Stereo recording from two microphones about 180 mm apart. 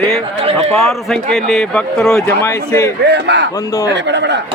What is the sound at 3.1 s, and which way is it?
A man's voice, 75° right (ahead or behind).